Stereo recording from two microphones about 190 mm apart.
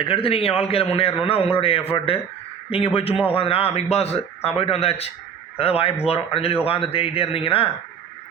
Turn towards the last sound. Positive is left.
turn(degrees=30)  # may be behind; listen again after turning